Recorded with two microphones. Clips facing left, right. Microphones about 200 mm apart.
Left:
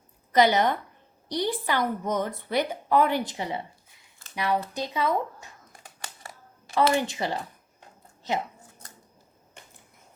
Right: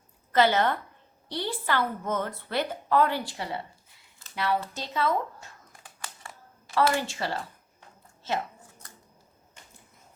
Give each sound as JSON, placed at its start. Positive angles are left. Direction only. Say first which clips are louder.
{"t": 0.3, "sound": "a woman's voice", "louder": "left 2 dB", "side_deg": 15}
{"t": 6.7, "sound": "a woman's voice", "louder": "left 2 dB", "side_deg": 20}